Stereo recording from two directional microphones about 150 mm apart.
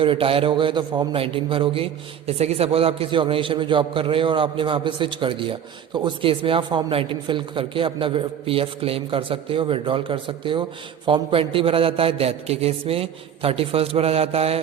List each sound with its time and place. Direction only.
0.0 s a man's voice: 35° right (ahead or behind)